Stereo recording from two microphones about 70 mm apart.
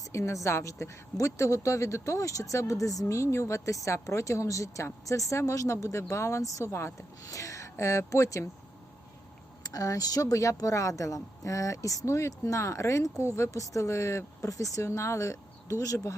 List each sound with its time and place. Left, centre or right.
0.0 s a woman's voice: left
7.3 s speech: left
9.6 s speech: left